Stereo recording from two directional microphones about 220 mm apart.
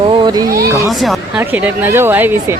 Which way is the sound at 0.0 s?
20° right (ahead or behind).